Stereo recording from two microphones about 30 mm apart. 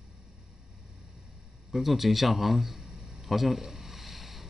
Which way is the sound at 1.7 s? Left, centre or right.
Centre.